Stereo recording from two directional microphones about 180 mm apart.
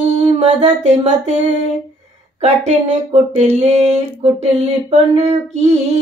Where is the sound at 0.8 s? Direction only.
40° right (ahead or behind).